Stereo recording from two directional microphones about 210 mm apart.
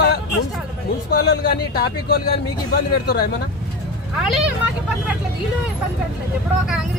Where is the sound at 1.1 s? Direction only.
50° left (ahead or behind).